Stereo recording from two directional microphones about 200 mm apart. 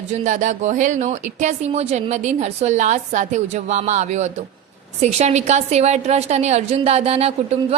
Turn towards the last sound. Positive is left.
turn(degrees=-30)  # may be behind; listen again after turning